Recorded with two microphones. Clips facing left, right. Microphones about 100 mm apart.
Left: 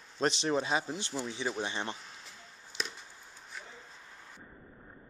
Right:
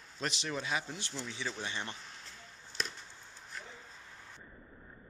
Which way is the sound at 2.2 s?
Centre (ahead or behind).